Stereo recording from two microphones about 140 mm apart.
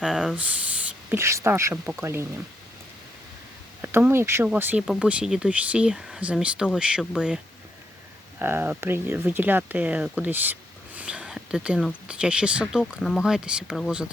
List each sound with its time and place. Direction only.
0.0 s speech: 5° right (ahead or behind)
1.1 s speech: 20° right (ahead or behind)
3.8 s speech: 15° right (ahead or behind)
8.4 s speech: 15° right (ahead or behind)